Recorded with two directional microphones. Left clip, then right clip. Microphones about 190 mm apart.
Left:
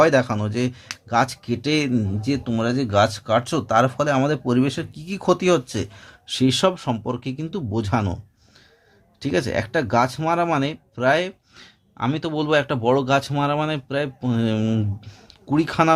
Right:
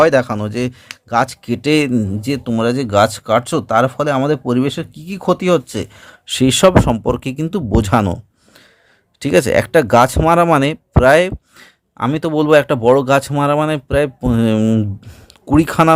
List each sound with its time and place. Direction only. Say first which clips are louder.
0.0 s speech: right 5 dB; 40° right (ahead or behind)
9.2 s speech: right 10 dB; 45° right (ahead or behind)